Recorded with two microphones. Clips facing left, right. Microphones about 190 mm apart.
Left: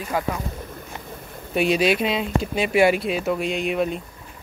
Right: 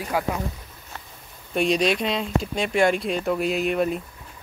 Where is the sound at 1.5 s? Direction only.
5° left (ahead or behind).